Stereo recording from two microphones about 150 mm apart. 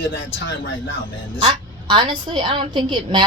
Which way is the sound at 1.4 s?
30° right (ahead or behind).